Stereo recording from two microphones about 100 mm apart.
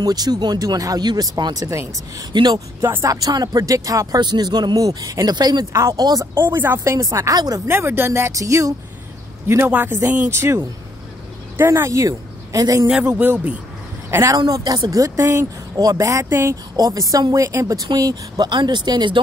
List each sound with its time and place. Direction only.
0.0 s speech: 40° right (ahead or behind)
5.7 s speech: 30° right (ahead or behind)
6.3 s a woman's voice: 20° right (ahead or behind)
6.8 s speech: 35° right (ahead or behind)
7.6 s a woman's voice: 25° right (ahead or behind)
9.7 s a woman's voice: 20° right (ahead or behind); by 12.8 s 40° right (ahead or behind)
13.1 s a woman's voice: 15° right (ahead or behind)
14.5 s speech: 45° right (ahead or behind); by 16.5 s 25° right (ahead or behind)
16.7 s speech: 40° right (ahead or behind)
18.5 s speech: 50° right (ahead or behind)